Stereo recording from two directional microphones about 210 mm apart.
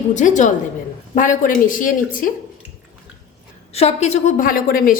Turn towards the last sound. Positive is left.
turn(degrees=40)  # may be behind; listen again after turning